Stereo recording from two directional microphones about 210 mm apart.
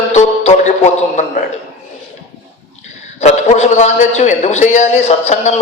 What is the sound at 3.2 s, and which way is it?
A man's voice, 35° left (ahead or behind).